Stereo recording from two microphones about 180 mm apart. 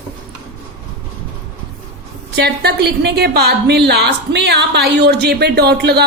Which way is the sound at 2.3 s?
65° right (ahead or behind).